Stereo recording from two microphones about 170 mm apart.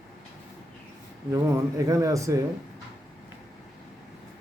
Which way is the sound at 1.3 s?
20° right (ahead or behind).